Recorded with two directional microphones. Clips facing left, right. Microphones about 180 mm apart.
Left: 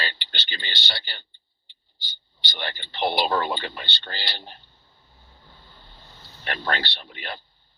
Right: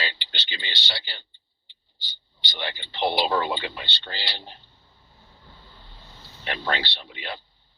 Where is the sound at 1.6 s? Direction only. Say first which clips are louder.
Left 1 dB; 50° left (ahead or behind).